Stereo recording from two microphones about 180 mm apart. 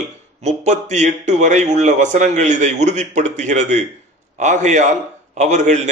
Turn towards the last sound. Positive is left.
turn(degrees=-40)  # may be behind; listen again after turning